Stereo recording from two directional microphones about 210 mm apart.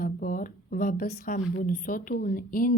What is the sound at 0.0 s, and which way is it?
A woman's voice, 40° left (ahead or behind).